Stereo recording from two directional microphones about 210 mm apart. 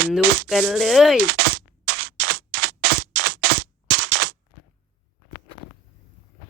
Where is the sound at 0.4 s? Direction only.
5° right (ahead or behind).